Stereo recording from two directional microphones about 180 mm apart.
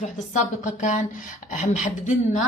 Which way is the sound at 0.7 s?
40° left (ahead or behind).